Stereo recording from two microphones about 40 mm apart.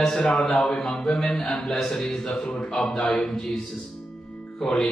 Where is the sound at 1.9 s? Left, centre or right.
Left.